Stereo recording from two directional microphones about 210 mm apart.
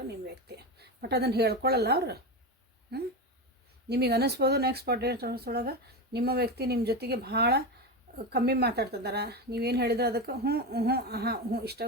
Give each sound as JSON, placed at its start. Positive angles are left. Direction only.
{"t": 0.4, "sound": "speech", "side_deg": -50}